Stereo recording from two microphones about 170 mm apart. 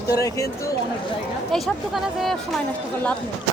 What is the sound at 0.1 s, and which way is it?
Speech, 20° left (ahead or behind).